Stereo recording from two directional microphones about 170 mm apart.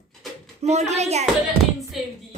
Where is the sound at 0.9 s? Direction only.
40° right (ahead or behind).